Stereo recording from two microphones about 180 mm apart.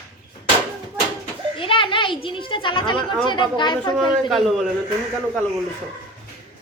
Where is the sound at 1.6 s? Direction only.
30° left (ahead or behind).